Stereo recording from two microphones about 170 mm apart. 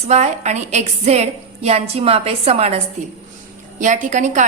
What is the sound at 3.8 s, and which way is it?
Speech, 45° right (ahead or behind).